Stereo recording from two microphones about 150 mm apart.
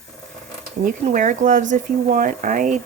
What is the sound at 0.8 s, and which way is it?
Speech, 60° right (ahead or behind).